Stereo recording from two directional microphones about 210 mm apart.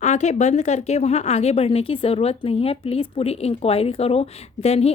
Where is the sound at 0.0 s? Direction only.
35° left (ahead or behind).